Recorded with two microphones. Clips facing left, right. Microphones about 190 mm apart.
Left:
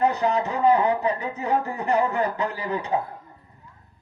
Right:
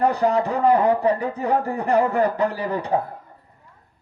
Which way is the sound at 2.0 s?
60° right (ahead or behind).